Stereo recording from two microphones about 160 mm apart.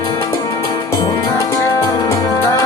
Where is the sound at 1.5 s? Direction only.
20° left (ahead or behind).